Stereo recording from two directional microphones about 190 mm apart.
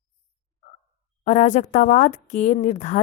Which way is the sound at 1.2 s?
35° left (ahead or behind).